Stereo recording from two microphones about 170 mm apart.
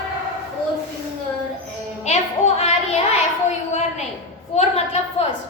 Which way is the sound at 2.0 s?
40° left (ahead or behind).